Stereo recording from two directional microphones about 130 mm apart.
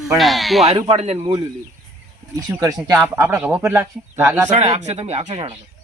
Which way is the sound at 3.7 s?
20° right (ahead or behind).